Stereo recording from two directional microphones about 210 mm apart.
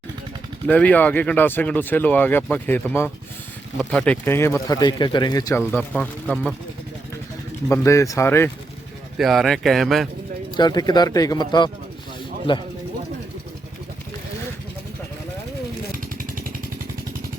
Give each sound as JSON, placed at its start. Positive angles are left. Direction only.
{"t": 0.7, "sound": "speech", "side_deg": 5}
{"t": 5.7, "sound": "speech", "side_deg": 5}
{"t": 7.7, "sound": "speech", "side_deg": 15}
{"t": 9.1, "sound": "speech", "side_deg": 0}
{"t": 10.6, "sound": "speech", "side_deg": 20}
{"t": 16.1, "sound": "vehicle", "side_deg": -40}